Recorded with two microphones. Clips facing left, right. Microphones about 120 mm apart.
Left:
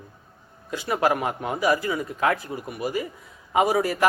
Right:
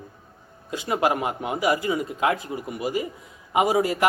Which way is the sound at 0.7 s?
20° right (ahead or behind).